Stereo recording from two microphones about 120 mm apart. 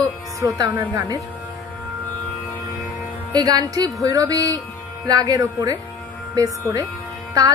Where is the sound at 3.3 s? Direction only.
30° right (ahead or behind).